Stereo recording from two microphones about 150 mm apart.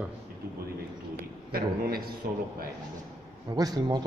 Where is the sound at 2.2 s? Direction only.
75° right (ahead or behind).